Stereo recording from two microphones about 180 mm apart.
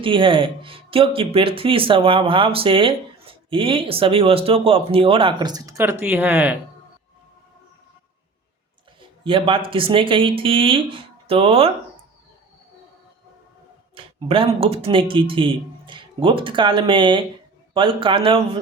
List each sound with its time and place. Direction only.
0.0 s speech: 30° right (ahead or behind); by 6.6 s 10° right (ahead or behind)
9.0 s speech: 30° right (ahead or behind)
13.9 s speech: 30° right (ahead or behind)